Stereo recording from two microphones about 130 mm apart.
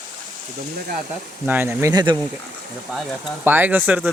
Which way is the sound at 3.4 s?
15° right (ahead or behind).